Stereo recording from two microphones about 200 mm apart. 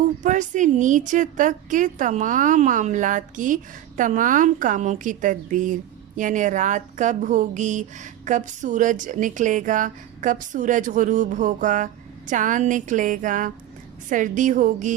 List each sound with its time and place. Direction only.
0.2 s a woman's voice: 40° right (ahead or behind)